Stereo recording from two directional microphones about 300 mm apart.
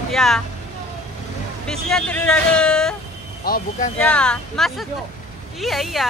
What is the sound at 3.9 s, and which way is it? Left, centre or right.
Speech, centre.